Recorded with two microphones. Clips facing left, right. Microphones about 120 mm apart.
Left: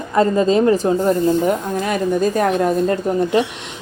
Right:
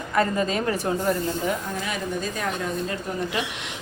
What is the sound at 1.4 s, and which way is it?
A woman's voice, 50° left (ahead or behind).